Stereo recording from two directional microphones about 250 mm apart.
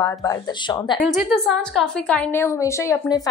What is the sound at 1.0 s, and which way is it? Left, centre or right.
A woman's voice, centre.